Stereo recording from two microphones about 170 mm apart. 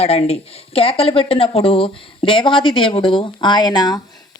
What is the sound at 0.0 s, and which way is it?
Speech, 35° left (ahead or behind).